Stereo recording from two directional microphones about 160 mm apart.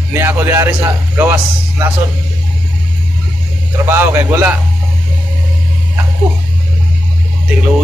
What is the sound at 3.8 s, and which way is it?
Speech, 15° right (ahead or behind).